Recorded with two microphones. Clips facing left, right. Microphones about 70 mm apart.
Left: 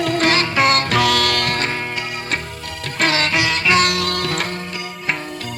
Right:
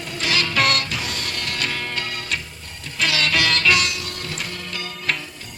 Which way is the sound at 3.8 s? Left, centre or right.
Left.